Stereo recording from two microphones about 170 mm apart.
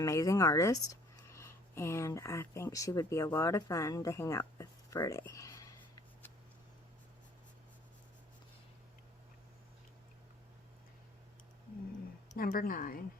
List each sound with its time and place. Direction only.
0.0 s speech: 20° left (ahead or behind)
12.3 s a woman's voice: 55° left (ahead or behind)